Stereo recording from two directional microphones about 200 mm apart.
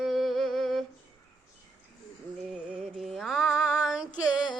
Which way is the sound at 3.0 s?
Centre (ahead or behind).